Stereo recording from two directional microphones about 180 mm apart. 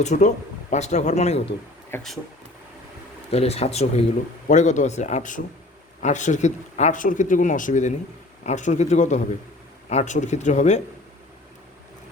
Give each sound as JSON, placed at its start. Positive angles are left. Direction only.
{"t": 0.0, "sound": "speech", "side_deg": 40}
{"t": 1.9, "sound": "speech", "side_deg": 5}
{"t": 3.3, "sound": "speech", "side_deg": 35}